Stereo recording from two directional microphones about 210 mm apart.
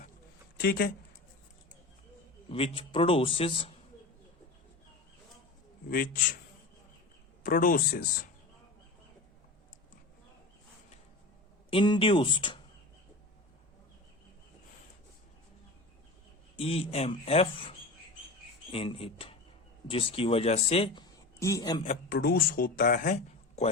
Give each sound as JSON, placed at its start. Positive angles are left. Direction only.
{"t": 0.6, "sound": "speech", "side_deg": 50}
{"t": 2.5, "sound": "speech", "side_deg": 25}
{"t": 7.4, "sound": "speech", "side_deg": 40}
{"t": 11.7, "sound": "speech", "side_deg": 25}
{"t": 16.6, "sound": "speech", "side_deg": 30}
{"t": 21.3, "sound": "a man's voice", "side_deg": 15}
{"t": 21.8, "sound": "speech", "side_deg": 45}